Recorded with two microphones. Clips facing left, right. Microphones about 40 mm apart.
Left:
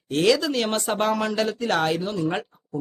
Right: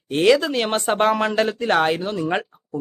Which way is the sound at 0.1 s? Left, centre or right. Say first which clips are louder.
Right 4 dB; right.